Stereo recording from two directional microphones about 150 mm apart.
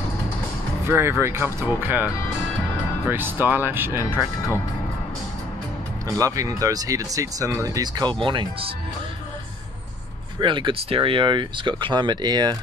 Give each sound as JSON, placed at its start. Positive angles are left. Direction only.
{"t": 0.8, "sound": "speech", "side_deg": -15}
{"t": 6.0, "sound": "speech", "side_deg": -20}
{"t": 10.4, "sound": "speech", "side_deg": -35}